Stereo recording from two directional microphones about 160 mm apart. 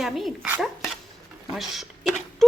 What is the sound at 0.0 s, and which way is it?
Speech, centre (ahead or behind).